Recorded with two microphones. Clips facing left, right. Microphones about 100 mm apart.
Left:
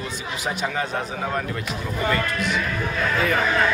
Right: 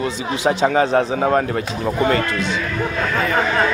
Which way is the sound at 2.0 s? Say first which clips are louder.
Right 5 dB; 30° right (ahead or behind).